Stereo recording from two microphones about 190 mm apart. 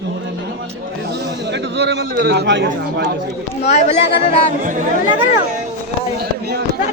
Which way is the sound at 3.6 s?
35° left (ahead or behind).